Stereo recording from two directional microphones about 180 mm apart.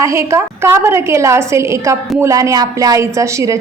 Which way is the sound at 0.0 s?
15° right (ahead or behind).